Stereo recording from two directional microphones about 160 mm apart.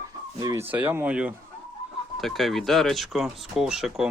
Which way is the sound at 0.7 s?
10° right (ahead or behind).